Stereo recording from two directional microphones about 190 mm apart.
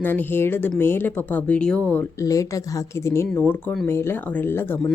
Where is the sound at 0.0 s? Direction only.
10° left (ahead or behind).